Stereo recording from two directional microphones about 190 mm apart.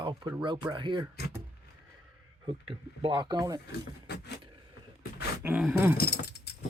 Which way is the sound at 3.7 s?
60° left (ahead or behind).